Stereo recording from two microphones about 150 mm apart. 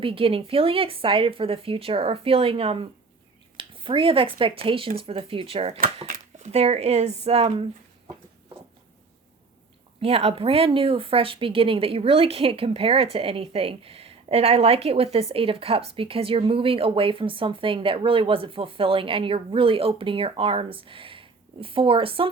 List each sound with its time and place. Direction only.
0.0 s speech: 35° right (ahead or behind)
10.0 s speech: 40° right (ahead or behind)